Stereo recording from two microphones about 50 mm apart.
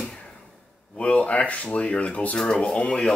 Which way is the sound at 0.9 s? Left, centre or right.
Left.